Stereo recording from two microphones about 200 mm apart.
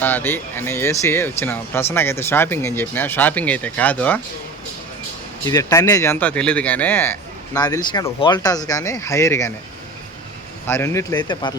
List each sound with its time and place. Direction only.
0.0 s speech: 10° left (ahead or behind)
5.5 s speech: 20° left (ahead or behind)
10.7 s speech: 10° left (ahead or behind)